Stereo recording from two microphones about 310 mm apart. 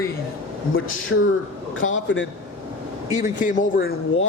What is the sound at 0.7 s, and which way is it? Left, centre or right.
A man's voice, left.